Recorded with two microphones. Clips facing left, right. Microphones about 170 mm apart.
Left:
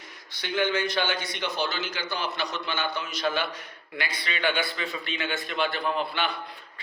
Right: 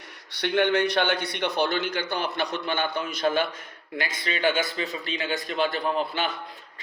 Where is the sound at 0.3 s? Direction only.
65° right (ahead or behind).